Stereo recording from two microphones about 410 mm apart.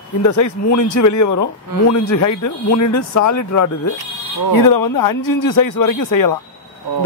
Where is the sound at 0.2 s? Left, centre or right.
Left.